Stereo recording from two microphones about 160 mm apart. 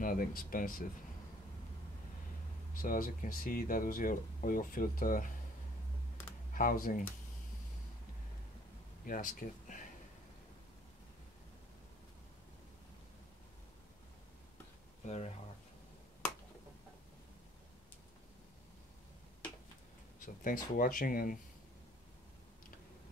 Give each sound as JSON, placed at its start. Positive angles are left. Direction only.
{"t": 0.0, "sound": "speech", "side_deg": 65}
{"t": 2.7, "sound": "speech", "side_deg": 60}
{"t": 6.5, "sound": "speech", "side_deg": 60}
{"t": 9.0, "sound": "speech", "side_deg": 60}
{"t": 15.0, "sound": "speech", "side_deg": 45}
{"t": 20.2, "sound": "speech", "side_deg": 60}